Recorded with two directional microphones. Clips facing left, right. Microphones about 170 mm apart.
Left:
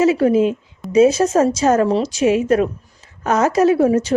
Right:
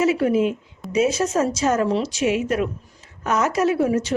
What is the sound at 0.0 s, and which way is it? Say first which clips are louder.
A woman's voice: left 4 dB; 30° left (ahead or behind).